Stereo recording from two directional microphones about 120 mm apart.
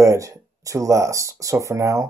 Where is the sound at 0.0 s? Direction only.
25° right (ahead or behind).